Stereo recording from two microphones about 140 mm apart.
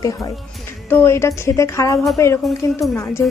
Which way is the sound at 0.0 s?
25° left (ahead or behind).